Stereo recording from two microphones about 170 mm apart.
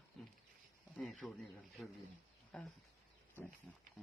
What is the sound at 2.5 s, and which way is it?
Speech, 5° left (ahead or behind).